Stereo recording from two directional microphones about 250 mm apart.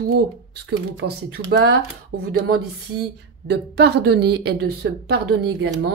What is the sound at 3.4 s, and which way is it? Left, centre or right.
A woman's voice, right.